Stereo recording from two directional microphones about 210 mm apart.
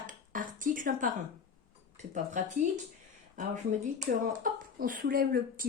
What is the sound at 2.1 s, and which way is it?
Speech, 35° right (ahead or behind).